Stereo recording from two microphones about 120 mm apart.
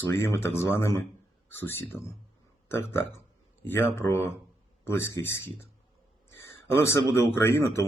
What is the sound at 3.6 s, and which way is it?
Speech, 20° left (ahead or behind).